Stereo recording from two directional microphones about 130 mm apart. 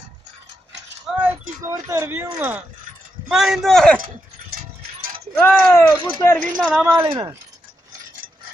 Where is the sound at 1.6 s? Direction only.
20° right (ahead or behind); by 4.0 s 5° left (ahead or behind).